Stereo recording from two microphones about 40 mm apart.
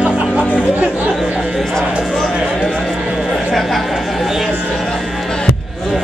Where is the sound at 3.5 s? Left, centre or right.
Centre.